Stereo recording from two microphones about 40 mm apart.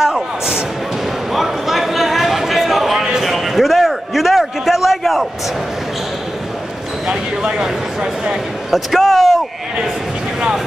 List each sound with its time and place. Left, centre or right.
0.0 s speech: centre
1.3 s a sound: centre
7.1 s speech: centre
8.6 s speech: centre